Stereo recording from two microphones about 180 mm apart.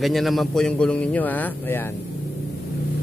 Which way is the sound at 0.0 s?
Centre (ahead or behind).